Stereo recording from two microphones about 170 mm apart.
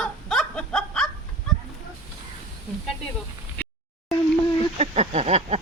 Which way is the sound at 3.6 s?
10° left (ahead or behind).